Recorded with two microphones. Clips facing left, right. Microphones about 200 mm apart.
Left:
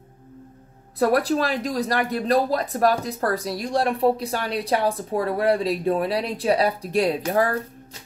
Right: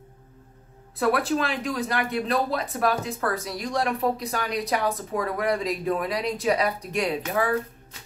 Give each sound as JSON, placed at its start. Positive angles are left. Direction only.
{"t": 0.9, "sound": "speech", "side_deg": 40}